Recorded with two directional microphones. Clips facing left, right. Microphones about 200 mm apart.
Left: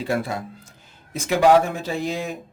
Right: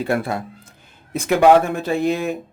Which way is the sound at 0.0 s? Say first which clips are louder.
Right 3 dB; 55° right (ahead or behind).